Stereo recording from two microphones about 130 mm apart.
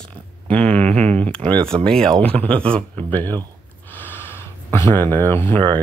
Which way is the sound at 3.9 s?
15° left (ahead or behind).